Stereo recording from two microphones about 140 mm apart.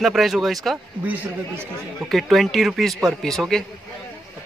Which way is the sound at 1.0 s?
10° right (ahead or behind).